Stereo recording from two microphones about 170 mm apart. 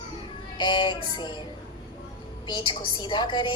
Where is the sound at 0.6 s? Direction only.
25° left (ahead or behind).